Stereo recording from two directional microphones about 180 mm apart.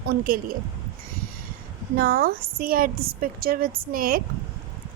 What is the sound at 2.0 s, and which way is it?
A woman's voice, 55° right (ahead or behind).